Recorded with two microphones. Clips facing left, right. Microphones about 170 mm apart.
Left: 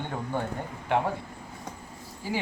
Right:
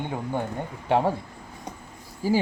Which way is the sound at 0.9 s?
30° right (ahead or behind).